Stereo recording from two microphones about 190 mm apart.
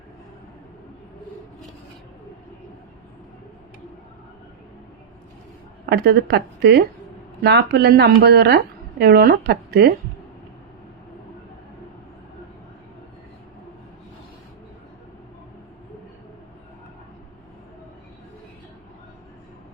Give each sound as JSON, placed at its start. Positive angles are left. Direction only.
{"t": 5.8, "sound": "a woman's voice", "side_deg": -55}